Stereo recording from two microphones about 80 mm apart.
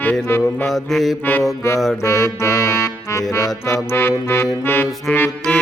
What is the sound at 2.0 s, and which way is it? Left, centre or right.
Music, left.